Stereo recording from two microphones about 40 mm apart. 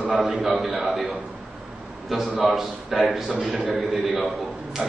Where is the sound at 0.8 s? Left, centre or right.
Right.